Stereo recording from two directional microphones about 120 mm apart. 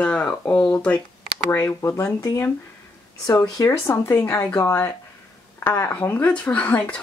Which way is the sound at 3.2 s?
30° left (ahead or behind).